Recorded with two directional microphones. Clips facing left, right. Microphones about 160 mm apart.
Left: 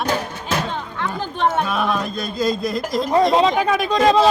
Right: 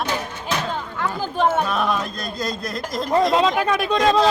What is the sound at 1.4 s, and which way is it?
Speech, centre (ahead or behind).